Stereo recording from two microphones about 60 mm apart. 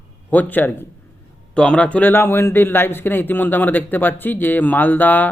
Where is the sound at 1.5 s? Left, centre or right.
Centre.